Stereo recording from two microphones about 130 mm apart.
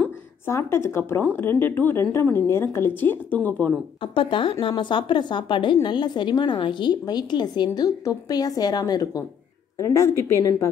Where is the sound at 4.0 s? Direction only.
45° left (ahead or behind).